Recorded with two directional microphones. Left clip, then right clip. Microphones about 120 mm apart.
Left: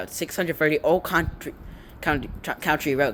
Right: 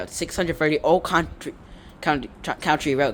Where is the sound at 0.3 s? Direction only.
20° right (ahead or behind).